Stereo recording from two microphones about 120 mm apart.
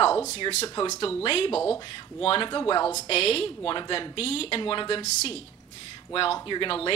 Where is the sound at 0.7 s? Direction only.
30° left (ahead or behind).